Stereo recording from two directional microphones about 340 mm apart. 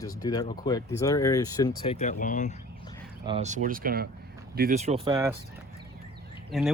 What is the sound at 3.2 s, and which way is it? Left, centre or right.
Speech, centre.